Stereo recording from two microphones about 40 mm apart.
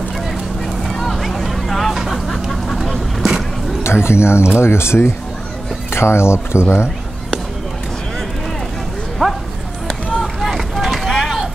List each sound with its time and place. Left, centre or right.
0.8 s vehicle: centre
1.3 s a sound: centre
2.0 s vehicle: centre
3.8 s speech: left
9.2 s a sound: centre
10.4 s vehicle: centre